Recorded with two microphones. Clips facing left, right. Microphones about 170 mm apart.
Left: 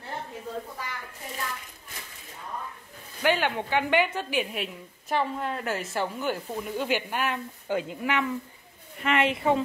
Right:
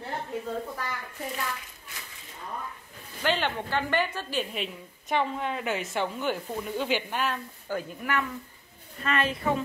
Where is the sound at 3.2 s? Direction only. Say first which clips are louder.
Left 3 dB; 10° left (ahead or behind).